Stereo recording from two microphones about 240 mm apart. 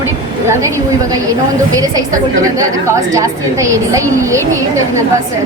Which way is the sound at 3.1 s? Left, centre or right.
Centre.